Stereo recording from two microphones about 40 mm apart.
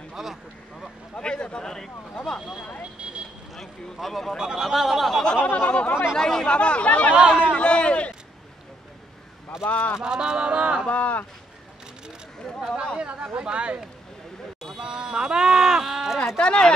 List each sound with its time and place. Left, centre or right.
0.1 s speech: centre
1.1 s a man's voice: left
3.5 s speech: centre
4.4 s speech: centre
5.4 s speech: left
6.1 s speech: centre
6.5 s a man's voice: left
9.7 s speech: left
9.9 s music: centre
10.9 s speech: left
12.9 s music: right
14.8 s sheep: right
16.3 s a man's voice: left